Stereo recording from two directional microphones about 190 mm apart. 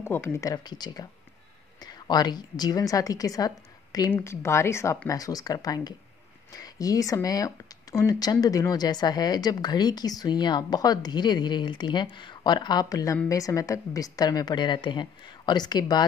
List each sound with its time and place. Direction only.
0.0 s speech: 15° left (ahead or behind)